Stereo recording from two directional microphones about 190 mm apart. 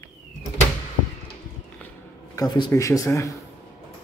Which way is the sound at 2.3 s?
20° left (ahead or behind).